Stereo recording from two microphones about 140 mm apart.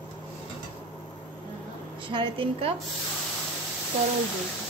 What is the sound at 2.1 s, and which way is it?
Speech, 40° right (ahead or behind).